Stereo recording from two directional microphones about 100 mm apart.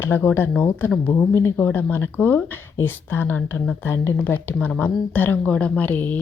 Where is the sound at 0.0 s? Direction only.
20° left (ahead or behind).